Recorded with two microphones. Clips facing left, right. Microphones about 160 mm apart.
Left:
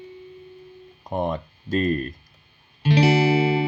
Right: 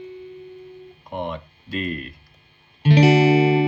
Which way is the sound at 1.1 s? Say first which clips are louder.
Left 4 dB; 40° left (ahead or behind).